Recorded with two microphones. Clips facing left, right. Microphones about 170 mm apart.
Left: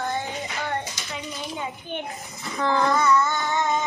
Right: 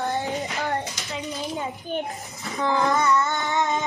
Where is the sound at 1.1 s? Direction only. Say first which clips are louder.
Right 4 dB; 35° right (ahead or behind).